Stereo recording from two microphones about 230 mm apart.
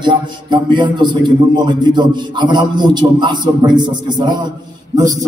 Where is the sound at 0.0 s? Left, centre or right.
Centre.